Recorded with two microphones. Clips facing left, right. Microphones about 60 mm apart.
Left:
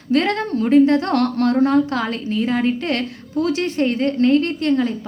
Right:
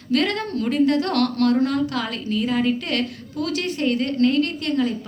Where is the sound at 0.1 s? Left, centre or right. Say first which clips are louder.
Left 3 dB; left.